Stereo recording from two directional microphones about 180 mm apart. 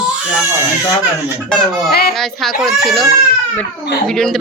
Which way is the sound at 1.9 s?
60° left (ahead or behind).